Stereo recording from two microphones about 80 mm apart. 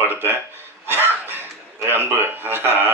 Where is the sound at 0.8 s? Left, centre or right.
Right.